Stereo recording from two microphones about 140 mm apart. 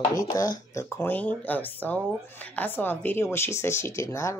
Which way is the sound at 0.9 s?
15° left (ahead or behind).